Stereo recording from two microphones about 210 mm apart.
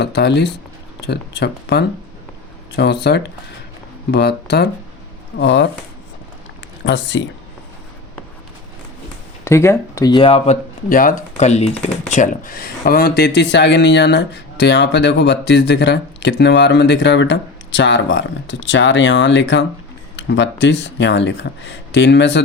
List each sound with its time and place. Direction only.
0.0 s speech: 55° left (ahead or behind)
6.8 s speech: 60° left (ahead or behind)
9.4 s speech: 10° left (ahead or behind); by 22.4 s 55° left (ahead or behind)